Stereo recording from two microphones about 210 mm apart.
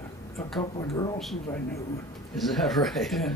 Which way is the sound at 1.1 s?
Centre (ahead or behind).